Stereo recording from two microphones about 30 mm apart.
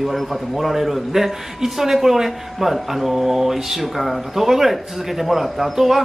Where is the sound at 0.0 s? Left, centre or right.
Centre.